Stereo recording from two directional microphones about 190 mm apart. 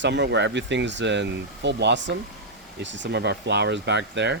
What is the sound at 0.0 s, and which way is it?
Speech, 65° right (ahead or behind).